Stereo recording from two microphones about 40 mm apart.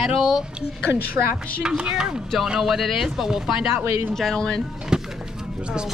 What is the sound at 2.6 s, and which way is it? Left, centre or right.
Speech, centre.